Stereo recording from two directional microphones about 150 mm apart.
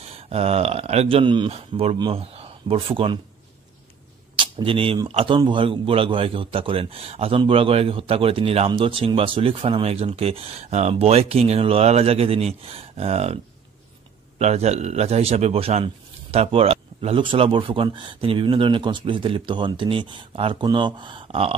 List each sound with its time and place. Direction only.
0.1 s a man's voice: 40° right (ahead or behind)
4.4 s a man's voice: 35° right (ahead or behind)
14.4 s a man's voice: 45° right (ahead or behind)